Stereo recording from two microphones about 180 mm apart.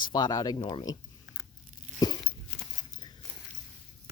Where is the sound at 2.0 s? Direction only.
25° left (ahead or behind).